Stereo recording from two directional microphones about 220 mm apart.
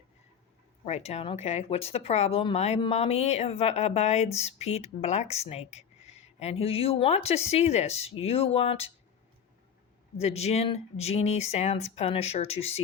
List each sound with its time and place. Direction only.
0.9 s speech: 30° left (ahead or behind)
10.2 s speech: 30° left (ahead or behind)